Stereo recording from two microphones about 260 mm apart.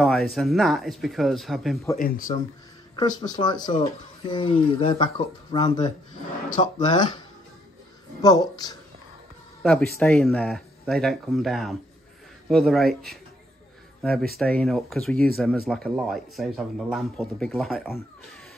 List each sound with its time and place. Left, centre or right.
0.0 s speech: centre
2.0 s speech: left
3.0 s speech: centre
9.6 s speech: centre
14.4 s speech: centre